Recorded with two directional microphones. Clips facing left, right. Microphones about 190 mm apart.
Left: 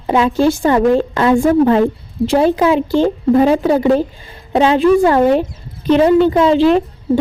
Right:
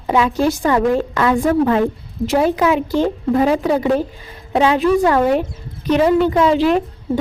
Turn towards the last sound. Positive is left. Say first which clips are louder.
# left 4 dB
turn(degrees=30)  # may be behind; listen again after turning